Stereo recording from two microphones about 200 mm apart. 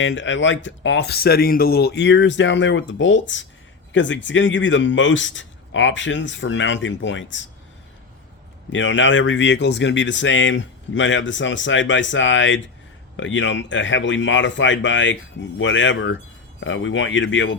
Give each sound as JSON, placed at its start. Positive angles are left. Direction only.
{"t": 0.0, "sound": "speech", "side_deg": 70}
{"t": 8.7, "sound": "speech", "side_deg": 70}